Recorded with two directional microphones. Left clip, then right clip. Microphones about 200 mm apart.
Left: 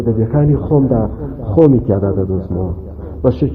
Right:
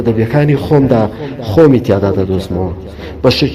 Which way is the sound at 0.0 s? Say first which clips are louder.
Right 4 dB; 30° right (ahead or behind).